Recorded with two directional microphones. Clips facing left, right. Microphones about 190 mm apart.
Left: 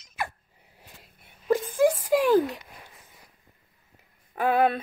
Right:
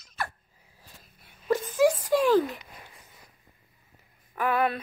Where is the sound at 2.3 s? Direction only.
10° left (ahead or behind).